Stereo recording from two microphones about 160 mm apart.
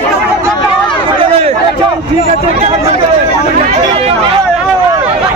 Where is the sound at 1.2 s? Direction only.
40° right (ahead or behind).